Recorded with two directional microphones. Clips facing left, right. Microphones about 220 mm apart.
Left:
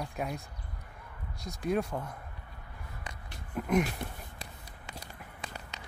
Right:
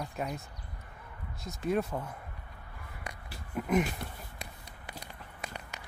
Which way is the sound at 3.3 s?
5° right (ahead or behind).